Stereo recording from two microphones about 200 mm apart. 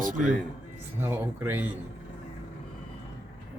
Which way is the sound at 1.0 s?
10° right (ahead or behind).